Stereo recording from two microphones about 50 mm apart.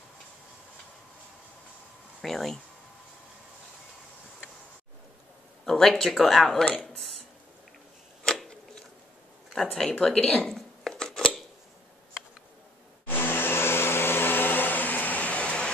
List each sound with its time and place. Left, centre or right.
2.2 s speech: centre
5.7 s speech: centre
9.5 s speech: centre
10.1 s speech: centre
10.5 s a sound: centre
13.0 s vacuum cleaner: left